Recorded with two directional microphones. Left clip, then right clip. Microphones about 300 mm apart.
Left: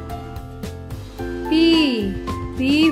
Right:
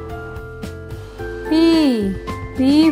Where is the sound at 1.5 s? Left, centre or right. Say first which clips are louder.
Right 2 dB; centre.